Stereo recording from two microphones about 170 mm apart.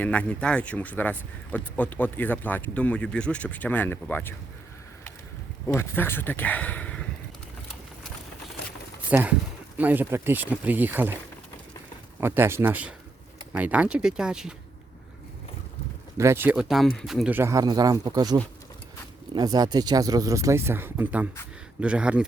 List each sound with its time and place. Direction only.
0.0 s speech: 5° left (ahead or behind)
5.6 s speech: 15° left (ahead or behind)
9.0 s speech: 10° right (ahead or behind)
12.2 s speech: 15° right (ahead or behind)
16.1 s speech: 15° right (ahead or behind)
17.3 s speech: 15° right (ahead or behind)